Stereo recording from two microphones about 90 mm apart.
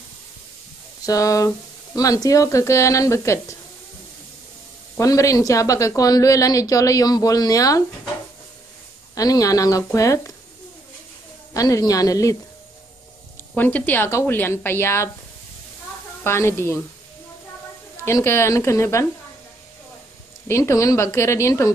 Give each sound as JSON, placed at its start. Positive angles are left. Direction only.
{"t": 1.0, "sound": "a woman's voice", "side_deg": 40}
{"t": 4.9, "sound": "a woman's voice", "side_deg": 35}
{"t": 9.1, "sound": "a woman's voice", "side_deg": 40}
{"t": 11.5, "sound": "a woman's voice", "side_deg": 40}
{"t": 13.6, "sound": "a woman's voice", "side_deg": 20}
{"t": 16.3, "sound": "a woman's voice", "side_deg": 25}
{"t": 18.0, "sound": "a woman's voice", "side_deg": 30}
{"t": 20.4, "sound": "a woman's voice", "side_deg": 30}